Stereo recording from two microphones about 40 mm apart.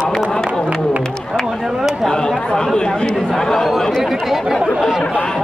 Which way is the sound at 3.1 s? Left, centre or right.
Centre.